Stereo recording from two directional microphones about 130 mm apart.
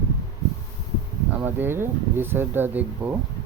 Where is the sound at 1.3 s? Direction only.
15° right (ahead or behind).